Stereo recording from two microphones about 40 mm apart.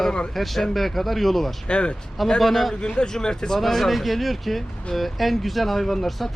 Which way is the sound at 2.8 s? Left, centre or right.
Left.